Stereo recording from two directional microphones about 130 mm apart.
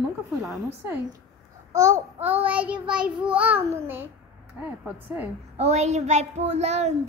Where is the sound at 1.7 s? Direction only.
25° right (ahead or behind).